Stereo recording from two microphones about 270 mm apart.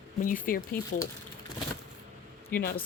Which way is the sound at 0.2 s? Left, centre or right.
Left.